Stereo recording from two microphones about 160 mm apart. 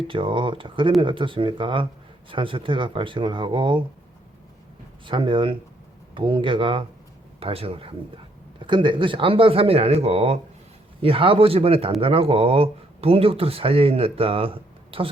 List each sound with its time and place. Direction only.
0.1 s speech: 30° right (ahead or behind)
5.0 s speech: 30° right (ahead or behind)